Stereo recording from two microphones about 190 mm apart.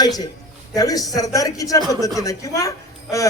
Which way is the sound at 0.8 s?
20° left (ahead or behind).